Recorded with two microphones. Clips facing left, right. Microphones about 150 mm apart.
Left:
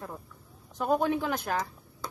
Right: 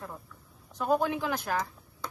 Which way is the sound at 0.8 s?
20° left (ahead or behind).